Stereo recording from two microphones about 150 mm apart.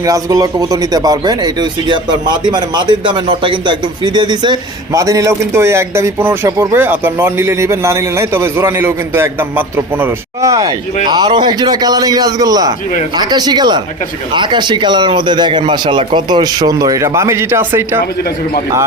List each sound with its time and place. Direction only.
0.0 s speech: 25° right (ahead or behind)